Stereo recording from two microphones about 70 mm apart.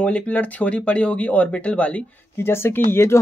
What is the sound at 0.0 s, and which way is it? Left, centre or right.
Speech, centre.